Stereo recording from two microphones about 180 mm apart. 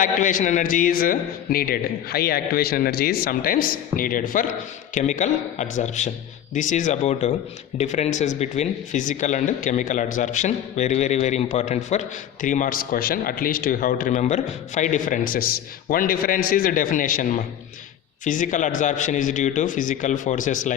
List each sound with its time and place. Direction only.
0.0 s a man's voice: 45° left (ahead or behind)